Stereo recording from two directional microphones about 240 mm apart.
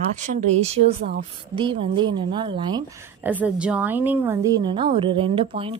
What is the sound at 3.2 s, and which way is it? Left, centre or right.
A woman's voice, centre.